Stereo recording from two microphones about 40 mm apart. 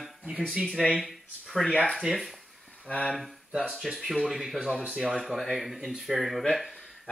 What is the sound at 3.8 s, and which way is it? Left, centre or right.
Speech, centre.